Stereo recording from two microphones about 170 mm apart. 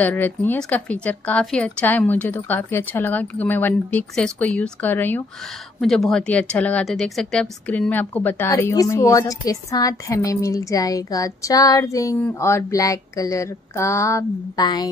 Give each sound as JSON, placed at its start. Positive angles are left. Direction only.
{"t": 0.0, "sound": "speech", "side_deg": 10}